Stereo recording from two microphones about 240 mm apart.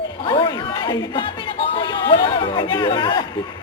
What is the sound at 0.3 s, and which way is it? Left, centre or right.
Chatter, centre.